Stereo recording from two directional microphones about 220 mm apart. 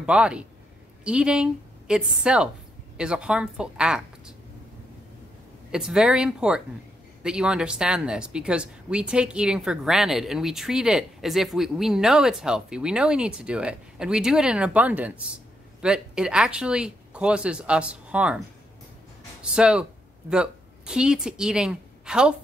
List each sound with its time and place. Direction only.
0.0 s a woman's voice: 5° right (ahead or behind)
5.7 s speech: 5° right (ahead or behind)
19.4 s a woman's voice: 5° right (ahead or behind)